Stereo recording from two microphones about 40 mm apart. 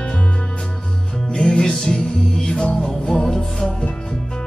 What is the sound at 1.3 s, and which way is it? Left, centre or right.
Music, centre.